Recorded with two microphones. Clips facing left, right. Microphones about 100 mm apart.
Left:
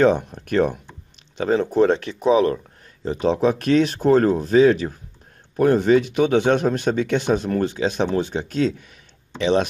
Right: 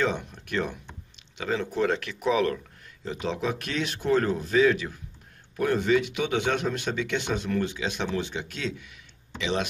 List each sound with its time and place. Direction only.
0.0 s speech: 45° left (ahead or behind); by 2.6 s 30° left (ahead or behind)
3.1 s speech: 40° left (ahead or behind)